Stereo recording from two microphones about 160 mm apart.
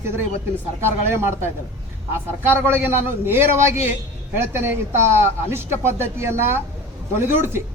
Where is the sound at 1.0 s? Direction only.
15° right (ahead or behind).